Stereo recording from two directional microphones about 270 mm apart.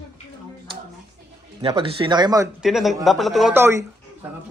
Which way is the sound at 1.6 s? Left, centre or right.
Centre.